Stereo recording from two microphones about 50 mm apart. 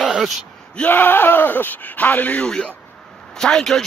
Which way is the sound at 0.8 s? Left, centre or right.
Left.